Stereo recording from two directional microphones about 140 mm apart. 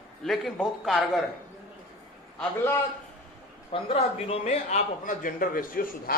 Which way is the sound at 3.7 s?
45° left (ahead or behind).